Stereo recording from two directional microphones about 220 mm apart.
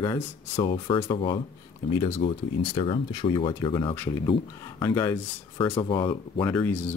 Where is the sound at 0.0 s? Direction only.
20° left (ahead or behind).